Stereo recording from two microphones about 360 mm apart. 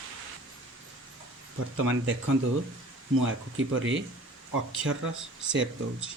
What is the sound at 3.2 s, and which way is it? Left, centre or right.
Speech, right.